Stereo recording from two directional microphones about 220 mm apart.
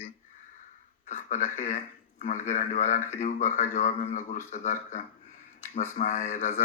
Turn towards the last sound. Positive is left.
turn(degrees=35)  # may be behind; listen again after turning